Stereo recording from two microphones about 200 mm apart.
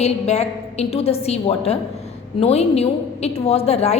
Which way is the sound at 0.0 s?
30° left (ahead or behind).